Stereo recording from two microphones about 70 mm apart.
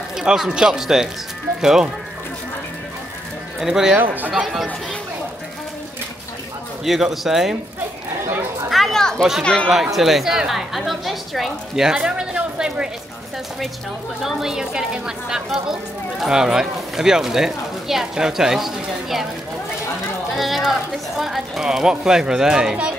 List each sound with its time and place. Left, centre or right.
0.2 s a woman's voice: centre
3.5 s speech: centre
3.9 s a man's voice: right
6.8 s a man's voice: centre
8.6 s children playing: centre
9.4 s speech: centre
9.9 s a woman's voice: centre
14.2 s a woman's voice: centre
20.3 s a woman's voice: centre